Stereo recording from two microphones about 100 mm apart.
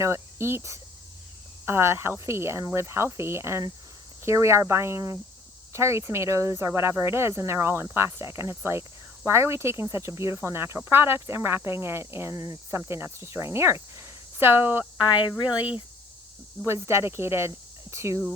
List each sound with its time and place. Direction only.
0.0 s speech: 25° right (ahead or behind)
14.9 s speech: 50° left (ahead or behind)
16.6 s speech: 25° right (ahead or behind)